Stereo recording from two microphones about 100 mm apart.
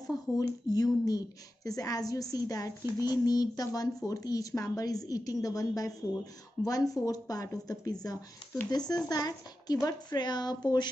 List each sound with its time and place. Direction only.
0.0 s speech: 40° left (ahead or behind)